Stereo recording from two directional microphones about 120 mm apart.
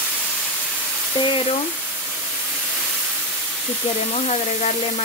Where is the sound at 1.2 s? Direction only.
40° left (ahead or behind).